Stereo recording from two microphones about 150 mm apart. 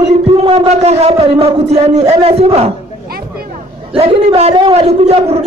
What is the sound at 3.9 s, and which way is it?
A man's voice, 40° right (ahead or behind).